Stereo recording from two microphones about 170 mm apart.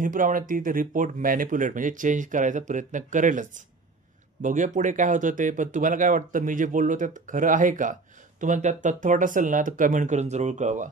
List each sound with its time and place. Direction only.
0.0 s speech: 50° right (ahead or behind)